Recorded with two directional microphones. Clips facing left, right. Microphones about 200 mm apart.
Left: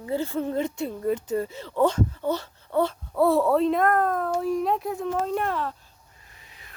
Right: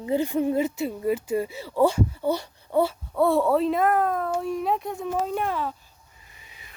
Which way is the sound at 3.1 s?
Centre (ahead or behind).